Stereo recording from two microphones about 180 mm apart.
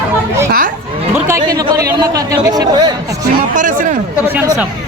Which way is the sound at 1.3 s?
20° right (ahead or behind).